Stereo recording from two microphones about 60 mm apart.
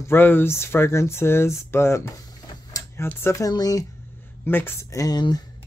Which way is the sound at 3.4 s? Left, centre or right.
Left.